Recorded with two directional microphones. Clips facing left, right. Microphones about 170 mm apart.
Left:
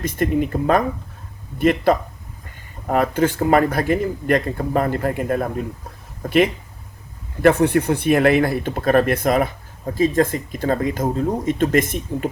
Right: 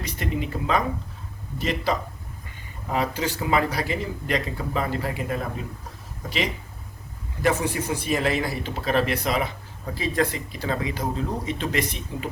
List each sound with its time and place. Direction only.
0.0 s speech: 50° left (ahead or behind)
7.4 s speech: 60° left (ahead or behind)